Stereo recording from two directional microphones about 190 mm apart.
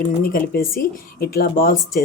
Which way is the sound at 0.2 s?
50° left (ahead or behind).